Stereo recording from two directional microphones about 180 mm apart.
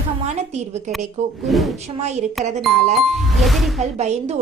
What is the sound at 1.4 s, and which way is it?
Speech, centre (ahead or behind).